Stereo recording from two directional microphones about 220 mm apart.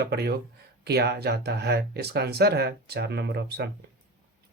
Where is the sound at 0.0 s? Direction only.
50° right (ahead or behind).